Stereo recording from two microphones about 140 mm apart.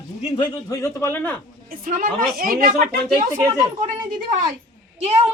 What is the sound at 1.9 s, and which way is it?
Speech, 85° right.